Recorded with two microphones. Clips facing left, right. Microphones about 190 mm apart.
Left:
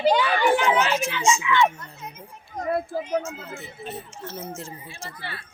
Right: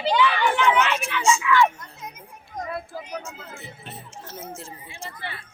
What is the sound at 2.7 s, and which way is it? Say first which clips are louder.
Speech: left 10 dB; 45° left (ahead or behind).